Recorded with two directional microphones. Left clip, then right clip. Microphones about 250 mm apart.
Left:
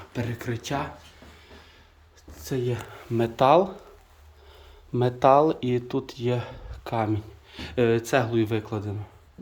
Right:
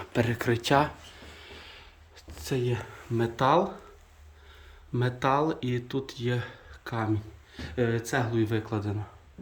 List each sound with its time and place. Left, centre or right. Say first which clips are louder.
0.1 s speech: right 5 dB; centre
2.3 s speech: left 1 dB; centre
4.9 s speech: left 8 dB; centre